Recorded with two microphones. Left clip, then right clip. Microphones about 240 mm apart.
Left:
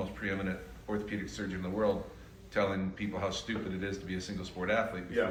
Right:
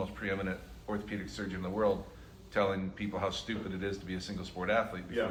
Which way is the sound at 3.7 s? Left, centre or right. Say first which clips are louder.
Even; centre.